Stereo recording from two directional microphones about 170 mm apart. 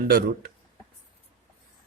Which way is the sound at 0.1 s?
65° right (ahead or behind).